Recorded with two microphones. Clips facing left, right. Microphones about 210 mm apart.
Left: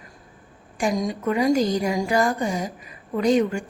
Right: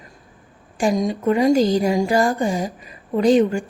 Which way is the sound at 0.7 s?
25° right (ahead or behind).